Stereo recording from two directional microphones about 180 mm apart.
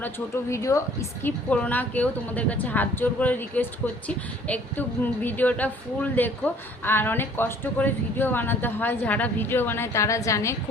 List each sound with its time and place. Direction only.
0.5 s a woman's voice: 15° left (ahead or behind)